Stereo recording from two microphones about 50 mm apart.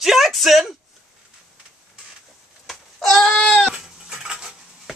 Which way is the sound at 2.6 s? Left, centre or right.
Centre.